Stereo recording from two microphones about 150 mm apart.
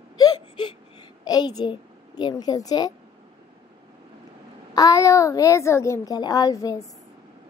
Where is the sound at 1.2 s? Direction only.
25° left (ahead or behind).